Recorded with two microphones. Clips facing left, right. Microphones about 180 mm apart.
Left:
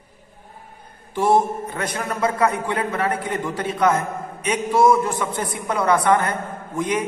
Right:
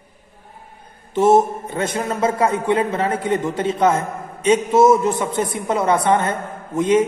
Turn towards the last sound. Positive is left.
turn(degrees=-25)  # may be behind; listen again after turning